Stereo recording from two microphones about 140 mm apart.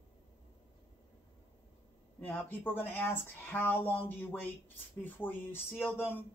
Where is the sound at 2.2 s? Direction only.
10° left (ahead or behind).